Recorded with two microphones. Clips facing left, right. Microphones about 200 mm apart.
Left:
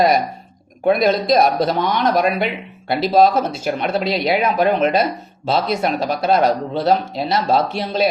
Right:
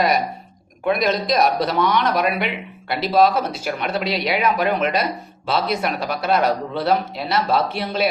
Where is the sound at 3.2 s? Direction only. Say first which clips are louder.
Left 3 dB; 45° left (ahead or behind).